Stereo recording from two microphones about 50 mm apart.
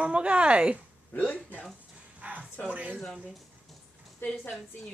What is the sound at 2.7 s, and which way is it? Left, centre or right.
Speech, right.